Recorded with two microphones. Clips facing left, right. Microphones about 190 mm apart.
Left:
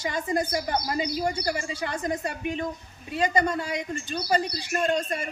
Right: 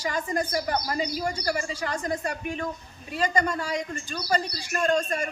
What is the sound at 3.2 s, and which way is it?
Speech, 20° left (ahead or behind).